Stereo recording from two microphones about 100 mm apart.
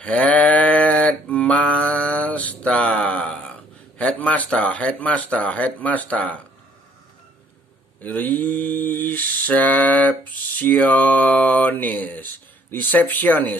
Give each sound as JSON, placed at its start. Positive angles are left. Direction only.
{"t": 0.0, "sound": "a sound", "side_deg": 15}
{"t": 4.0, "sound": "mantra", "side_deg": 15}
{"t": 8.0, "sound": "mantra", "side_deg": 15}